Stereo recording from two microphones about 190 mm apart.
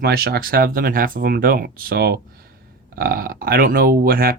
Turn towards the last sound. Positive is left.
turn(degrees=-50)  # may be behind; listen again after turning